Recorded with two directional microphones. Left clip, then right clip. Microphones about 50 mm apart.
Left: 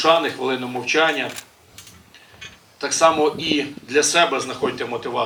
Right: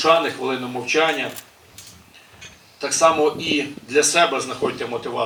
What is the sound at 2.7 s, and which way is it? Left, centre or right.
Speech, left.